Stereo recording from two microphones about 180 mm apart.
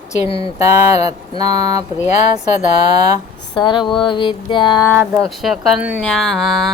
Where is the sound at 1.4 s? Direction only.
20° right (ahead or behind).